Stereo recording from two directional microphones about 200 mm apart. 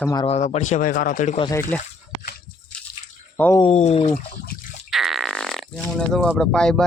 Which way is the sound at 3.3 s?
10° left (ahead or behind).